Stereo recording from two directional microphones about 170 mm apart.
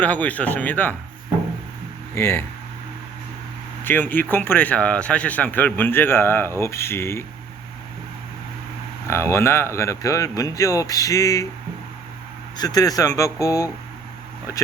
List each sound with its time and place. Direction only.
0.0 s speech: 10° left (ahead or behind)
2.1 s speech: 15° left (ahead or behind)
3.8 s speech: 10° left (ahead or behind)
9.0 s speech: 15° left (ahead or behind)
12.5 s speech: 20° left (ahead or behind)